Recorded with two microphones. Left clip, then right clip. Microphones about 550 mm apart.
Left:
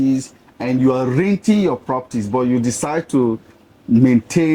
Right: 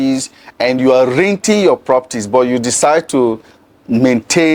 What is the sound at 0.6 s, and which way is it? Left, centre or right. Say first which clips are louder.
Speech: right 8 dB; right.